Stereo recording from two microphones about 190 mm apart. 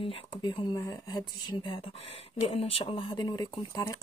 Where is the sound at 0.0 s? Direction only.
30° left (ahead or behind).